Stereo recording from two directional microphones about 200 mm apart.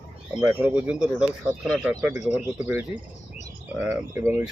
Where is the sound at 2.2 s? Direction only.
35° left (ahead or behind).